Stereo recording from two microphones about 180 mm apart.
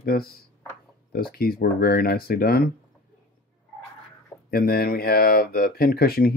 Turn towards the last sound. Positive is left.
turn(degrees=55)  # may be behind; listen again after turning